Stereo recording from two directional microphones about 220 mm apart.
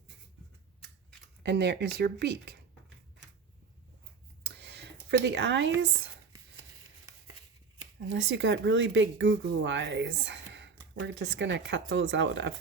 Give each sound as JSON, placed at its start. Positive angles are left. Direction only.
{"t": 1.5, "sound": "speech", "side_deg": -50}
{"t": 4.4, "sound": "a sound", "side_deg": -50}
{"t": 8.1, "sound": "speech", "side_deg": -55}